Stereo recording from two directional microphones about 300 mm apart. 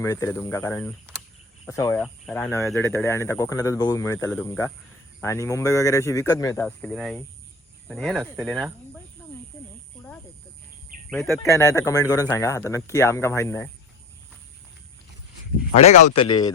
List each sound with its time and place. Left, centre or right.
0.0 s speech: centre
11.1 s speech: centre
15.7 s speech: left